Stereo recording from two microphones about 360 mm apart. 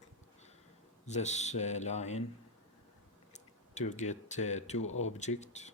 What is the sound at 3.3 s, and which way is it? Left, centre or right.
Speech, centre.